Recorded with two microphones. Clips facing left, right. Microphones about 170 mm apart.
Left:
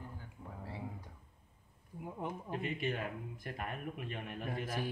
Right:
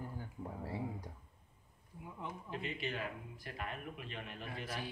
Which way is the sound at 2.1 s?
50° left (ahead or behind).